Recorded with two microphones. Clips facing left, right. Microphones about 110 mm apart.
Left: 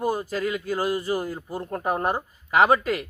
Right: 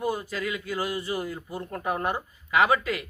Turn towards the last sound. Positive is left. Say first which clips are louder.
# left 3 dB
turn(degrees=40)  # may be behind; listen again after turning